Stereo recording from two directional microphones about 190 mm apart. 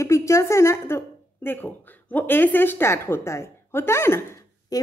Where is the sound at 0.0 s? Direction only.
15° left (ahead or behind).